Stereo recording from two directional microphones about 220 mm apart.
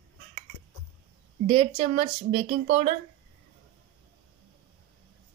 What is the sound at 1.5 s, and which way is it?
Speech, 25° right (ahead or behind).